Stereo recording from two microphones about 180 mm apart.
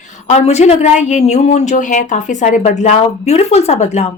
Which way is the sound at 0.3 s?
35° left (ahead or behind).